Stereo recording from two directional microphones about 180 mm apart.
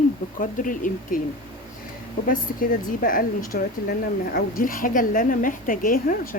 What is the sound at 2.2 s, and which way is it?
A woman's voice, 50° left (ahead or behind).